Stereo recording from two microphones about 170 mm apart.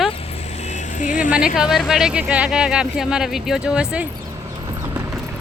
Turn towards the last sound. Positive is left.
turn(degrees=-5)  # may be behind; listen again after turning